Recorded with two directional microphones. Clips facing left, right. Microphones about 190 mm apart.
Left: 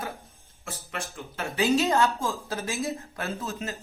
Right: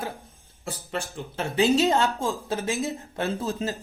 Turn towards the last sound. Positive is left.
turn(degrees=-35)  # may be behind; listen again after turning